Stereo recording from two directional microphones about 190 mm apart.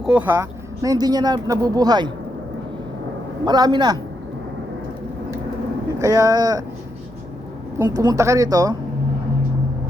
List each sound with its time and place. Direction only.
0.0 s speech: 5° right (ahead or behind); by 2.1 s 20° right (ahead or behind)
3.4 s speech: 20° right (ahead or behind)
6.0 s speech: 20° right (ahead or behind)
7.8 s speech: 20° right (ahead or behind)